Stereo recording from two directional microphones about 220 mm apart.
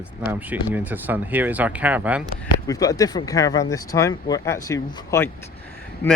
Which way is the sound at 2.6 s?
15° left (ahead or behind).